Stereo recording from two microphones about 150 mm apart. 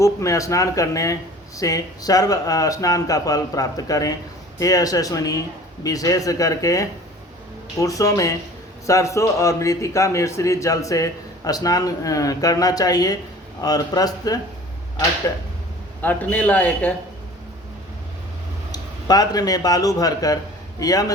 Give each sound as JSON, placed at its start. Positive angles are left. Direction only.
{"t": 0.0, "sound": "a man's voice", "side_deg": 20}
{"t": 16.0, "sound": "a man's voice", "side_deg": 10}
{"t": 18.7, "sound": "a man's voice", "side_deg": 25}